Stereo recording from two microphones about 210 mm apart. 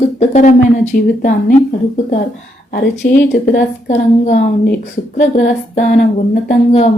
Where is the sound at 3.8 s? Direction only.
35° left (ahead or behind).